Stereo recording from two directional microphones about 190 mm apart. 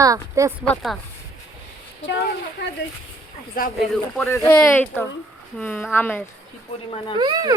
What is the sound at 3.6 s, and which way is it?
Speech, 45° left (ahead or behind).